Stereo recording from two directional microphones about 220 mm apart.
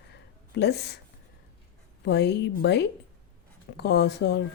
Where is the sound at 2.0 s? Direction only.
50° left (ahead or behind).